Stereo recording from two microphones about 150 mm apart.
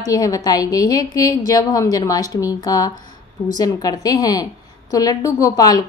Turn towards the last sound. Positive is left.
turn(degrees=25)  # may be behind; listen again after turning